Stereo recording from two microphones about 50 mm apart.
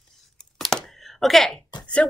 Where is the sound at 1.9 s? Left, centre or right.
Left.